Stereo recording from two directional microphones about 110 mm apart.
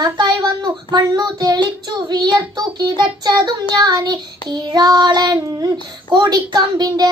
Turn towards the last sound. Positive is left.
turn(degrees=-40)  # may be behind; listen again after turning